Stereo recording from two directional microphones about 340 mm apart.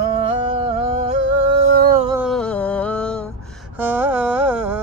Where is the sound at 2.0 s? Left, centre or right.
Centre.